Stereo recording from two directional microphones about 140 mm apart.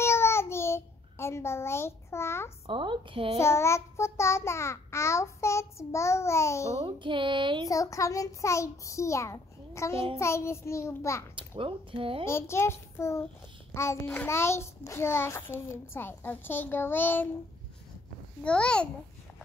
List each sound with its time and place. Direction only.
0.0 s child singing: 20° left (ahead or behind)
2.6 s speech: 35° right (ahead or behind)
3.3 s child singing: 20° left (ahead or behind)
6.8 s speech: 35° right (ahead or behind)
7.6 s child singing: 25° left (ahead or behind)
11.3 s speech: 35° right (ahead or behind)
12.3 s child singing: 20° left (ahead or behind)
13.7 s a child's voice: 15° left (ahead or behind)
18.4 s a child's voice: 5° left (ahead or behind)